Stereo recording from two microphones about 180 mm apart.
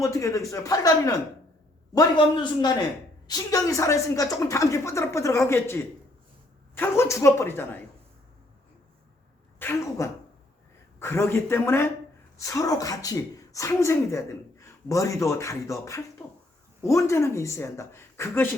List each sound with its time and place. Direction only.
0.0 s a man's voice: 15° left (ahead or behind)
9.6 s speech: 15° left (ahead or behind)